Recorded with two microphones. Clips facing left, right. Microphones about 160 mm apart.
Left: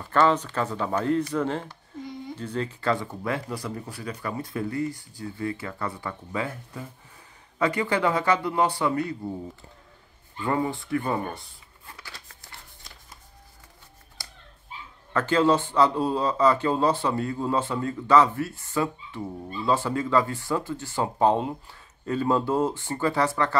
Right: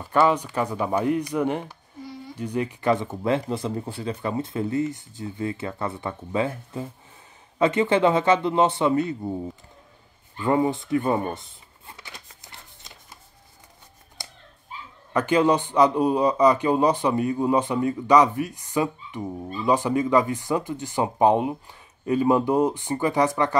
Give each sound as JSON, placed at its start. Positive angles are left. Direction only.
{"t": 0.0, "sound": "speech", "side_deg": -10}
{"t": 10.4, "sound": "shuffling cards", "side_deg": -20}
{"t": 14.2, "sound": "dog", "side_deg": -20}
{"t": 15.1, "sound": "speech", "side_deg": -15}